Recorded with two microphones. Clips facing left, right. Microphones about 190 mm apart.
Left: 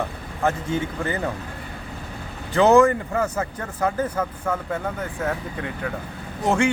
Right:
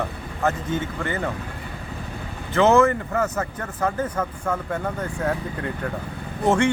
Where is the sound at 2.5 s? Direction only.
15° left (ahead or behind).